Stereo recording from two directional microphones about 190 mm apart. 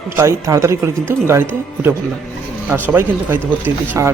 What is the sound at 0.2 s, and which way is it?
Speech, 15° right (ahead or behind).